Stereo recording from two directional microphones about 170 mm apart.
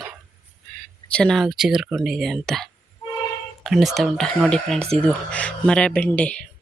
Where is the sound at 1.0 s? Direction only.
5° left (ahead or behind).